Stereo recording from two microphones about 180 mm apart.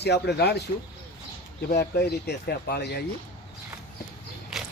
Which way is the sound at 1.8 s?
60° left (ahead or behind).